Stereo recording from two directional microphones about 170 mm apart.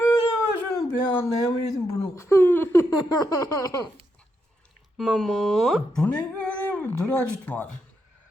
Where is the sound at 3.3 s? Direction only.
20° left (ahead or behind).